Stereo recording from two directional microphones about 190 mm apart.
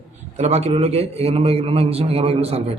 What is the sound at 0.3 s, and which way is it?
A man's voice, 35° right (ahead or behind).